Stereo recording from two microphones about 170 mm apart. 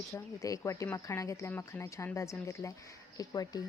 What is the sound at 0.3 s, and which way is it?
Speech, 20° left (ahead or behind).